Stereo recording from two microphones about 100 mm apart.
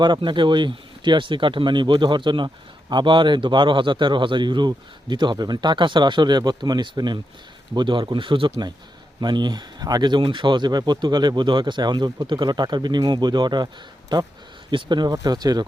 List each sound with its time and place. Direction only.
0.0 s speech: 50° right (ahead or behind)
14.7 s speech: 50° right (ahead or behind)